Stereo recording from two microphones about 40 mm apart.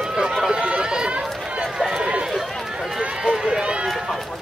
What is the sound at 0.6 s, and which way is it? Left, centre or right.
Chatter, right.